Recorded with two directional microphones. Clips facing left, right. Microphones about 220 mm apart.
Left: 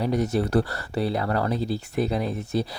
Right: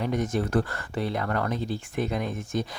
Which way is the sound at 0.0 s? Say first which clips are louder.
Left 3 dB; 35° left (ahead or behind).